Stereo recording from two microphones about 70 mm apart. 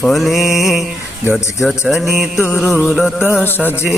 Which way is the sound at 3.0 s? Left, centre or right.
Centre.